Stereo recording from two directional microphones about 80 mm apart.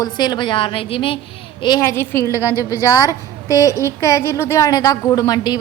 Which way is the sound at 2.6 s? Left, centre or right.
Left.